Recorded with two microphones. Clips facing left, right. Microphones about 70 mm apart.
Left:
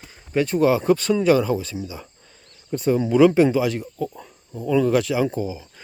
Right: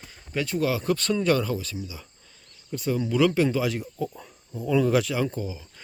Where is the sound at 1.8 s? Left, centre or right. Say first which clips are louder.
Left 6 dB; left.